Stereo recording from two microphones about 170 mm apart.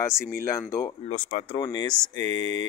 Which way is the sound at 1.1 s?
40° left (ahead or behind).